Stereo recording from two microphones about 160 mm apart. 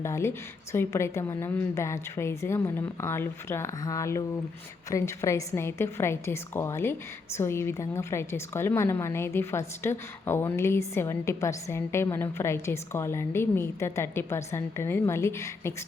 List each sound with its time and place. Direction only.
0.0 s a woman's voice: 15° left (ahead or behind)